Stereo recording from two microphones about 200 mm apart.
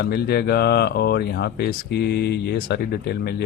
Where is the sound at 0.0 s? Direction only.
55° left (ahead or behind).